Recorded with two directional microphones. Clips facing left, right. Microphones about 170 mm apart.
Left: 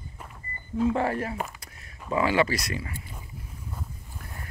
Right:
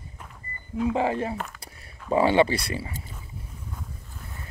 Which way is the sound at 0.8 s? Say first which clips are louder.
Right 1 dB; 15° right (ahead or behind).